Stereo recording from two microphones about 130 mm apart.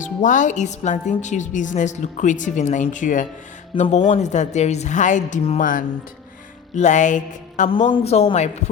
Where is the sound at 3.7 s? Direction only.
55° left (ahead or behind).